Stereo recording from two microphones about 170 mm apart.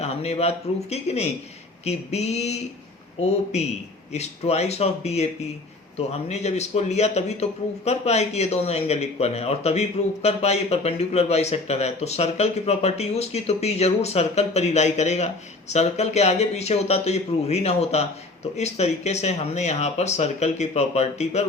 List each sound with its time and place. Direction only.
0.0 s speech: 35° left (ahead or behind)